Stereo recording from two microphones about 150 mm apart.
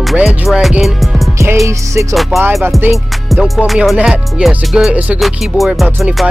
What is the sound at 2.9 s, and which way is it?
Music, 5° right (ahead or behind).